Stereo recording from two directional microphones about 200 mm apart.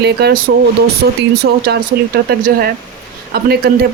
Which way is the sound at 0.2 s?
55° right (ahead or behind).